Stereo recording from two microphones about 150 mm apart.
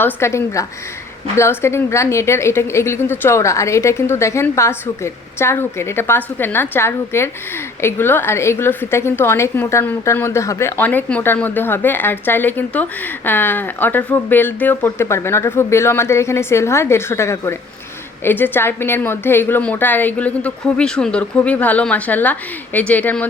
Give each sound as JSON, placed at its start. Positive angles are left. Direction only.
{"t": 0.0, "sound": "a woman's voice", "side_deg": 20}